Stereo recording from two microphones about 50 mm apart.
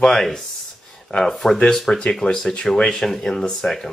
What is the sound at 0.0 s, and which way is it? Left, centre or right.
Speech, centre.